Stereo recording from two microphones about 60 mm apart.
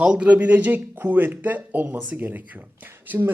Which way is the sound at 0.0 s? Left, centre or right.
Right.